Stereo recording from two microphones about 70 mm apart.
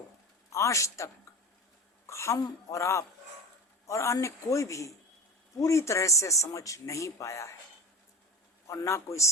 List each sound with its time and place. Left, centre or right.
0.5 s a man's voice: left
8.6 s a man's voice: left